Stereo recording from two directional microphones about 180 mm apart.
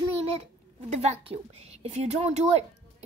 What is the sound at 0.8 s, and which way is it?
Speech, 35° right (ahead or behind).